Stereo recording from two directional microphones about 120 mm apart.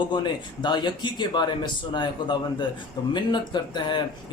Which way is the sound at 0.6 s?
40° left (ahead or behind).